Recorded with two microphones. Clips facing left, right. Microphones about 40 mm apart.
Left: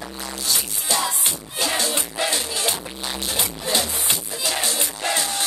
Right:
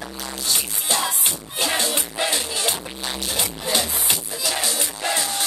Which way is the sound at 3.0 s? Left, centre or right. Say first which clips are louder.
Even; centre.